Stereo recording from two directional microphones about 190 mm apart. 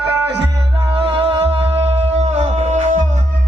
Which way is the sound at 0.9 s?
30° right (ahead or behind).